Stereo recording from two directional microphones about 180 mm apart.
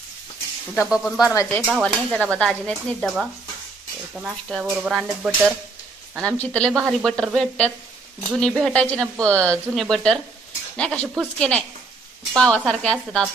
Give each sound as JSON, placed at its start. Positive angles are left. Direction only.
{"t": 0.8, "sound": "speech", "side_deg": -5}
{"t": 1.3, "sound": "speech", "side_deg": 15}
{"t": 1.7, "sound": "speech", "side_deg": 5}
{"t": 6.2, "sound": "speech", "side_deg": 5}